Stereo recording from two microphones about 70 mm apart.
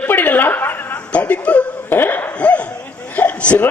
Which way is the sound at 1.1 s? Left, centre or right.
Centre.